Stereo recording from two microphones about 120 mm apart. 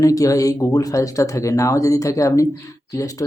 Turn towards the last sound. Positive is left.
turn(degrees=30)  # may be behind; listen again after turning